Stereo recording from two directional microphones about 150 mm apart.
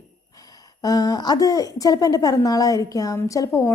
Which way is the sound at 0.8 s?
25° left (ahead or behind).